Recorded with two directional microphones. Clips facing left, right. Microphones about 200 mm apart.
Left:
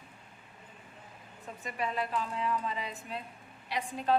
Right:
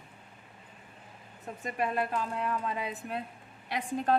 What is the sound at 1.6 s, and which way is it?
A woman's voice, 50° right (ahead or behind).